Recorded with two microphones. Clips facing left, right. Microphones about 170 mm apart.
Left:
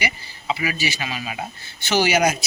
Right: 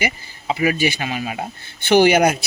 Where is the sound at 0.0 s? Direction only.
45° right (ahead or behind).